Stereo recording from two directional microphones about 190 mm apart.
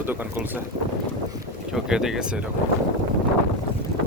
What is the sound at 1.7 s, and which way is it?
Speech, 5° right (ahead or behind).